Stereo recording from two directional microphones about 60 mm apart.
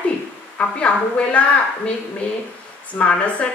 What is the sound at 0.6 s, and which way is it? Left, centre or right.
Speech, centre.